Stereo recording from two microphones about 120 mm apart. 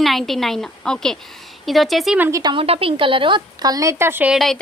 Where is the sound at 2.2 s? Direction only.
30° right (ahead or behind).